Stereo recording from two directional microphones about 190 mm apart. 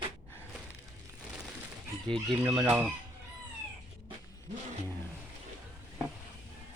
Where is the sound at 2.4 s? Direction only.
5° right (ahead or behind).